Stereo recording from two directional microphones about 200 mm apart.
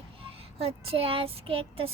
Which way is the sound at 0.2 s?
30° right (ahead or behind).